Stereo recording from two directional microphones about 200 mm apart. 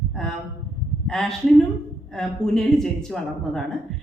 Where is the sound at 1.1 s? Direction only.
Centre (ahead or behind).